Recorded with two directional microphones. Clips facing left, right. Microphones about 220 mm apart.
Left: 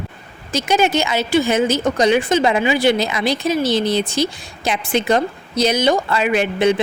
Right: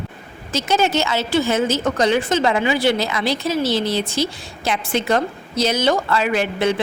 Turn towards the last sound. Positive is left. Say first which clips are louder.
# left 3 dB
turn(degrees=20)  # may be behind; listen again after turning